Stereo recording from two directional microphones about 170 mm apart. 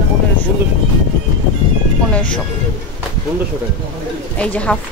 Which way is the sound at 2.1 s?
5° left (ahead or behind).